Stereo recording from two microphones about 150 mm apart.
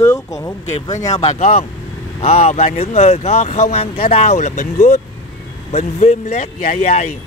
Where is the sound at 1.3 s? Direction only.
45° left (ahead or behind).